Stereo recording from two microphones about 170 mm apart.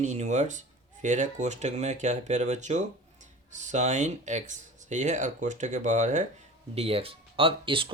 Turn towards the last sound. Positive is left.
turn(degrees=-30)  # may be behind; listen again after turning